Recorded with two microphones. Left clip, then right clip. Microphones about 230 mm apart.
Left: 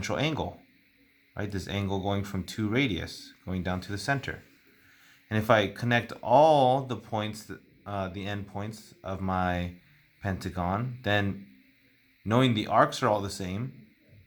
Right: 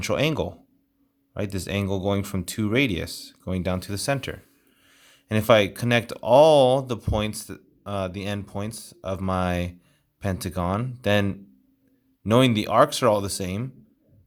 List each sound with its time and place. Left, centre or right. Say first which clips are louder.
0.0 s speech: right 6 dB; right